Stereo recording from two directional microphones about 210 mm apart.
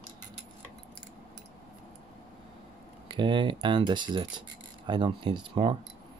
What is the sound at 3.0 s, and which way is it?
Speech, 25° right (ahead or behind).